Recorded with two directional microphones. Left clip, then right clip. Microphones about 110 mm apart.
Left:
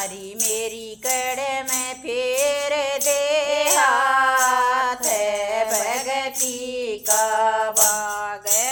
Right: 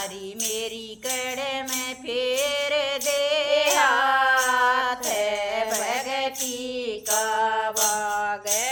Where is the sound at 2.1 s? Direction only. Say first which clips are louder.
Left 3 dB; 45° left (ahead or behind).